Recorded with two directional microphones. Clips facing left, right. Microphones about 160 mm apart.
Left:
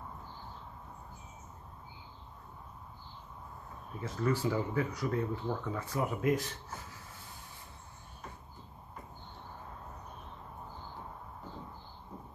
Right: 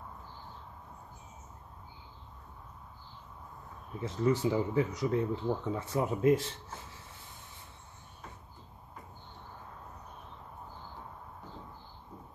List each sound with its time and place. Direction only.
4.0 s speech: 20° right (ahead or behind)